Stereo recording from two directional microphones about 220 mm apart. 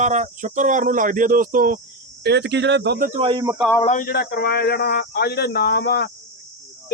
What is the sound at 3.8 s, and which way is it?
A man's voice, 35° left (ahead or behind).